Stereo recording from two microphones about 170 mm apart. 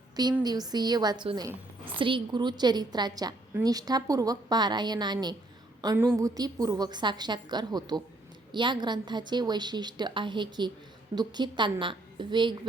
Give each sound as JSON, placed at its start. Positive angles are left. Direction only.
{"t": 0.4, "sound": "a woman's voice", "side_deg": -25}